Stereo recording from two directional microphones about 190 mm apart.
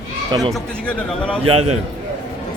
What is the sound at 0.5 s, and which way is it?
Speech, 5° left (ahead or behind).